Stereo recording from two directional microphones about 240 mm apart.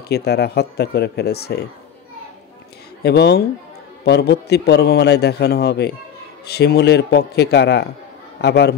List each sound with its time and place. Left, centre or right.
0.1 s a man's voice: left
3.0 s a man's voice: left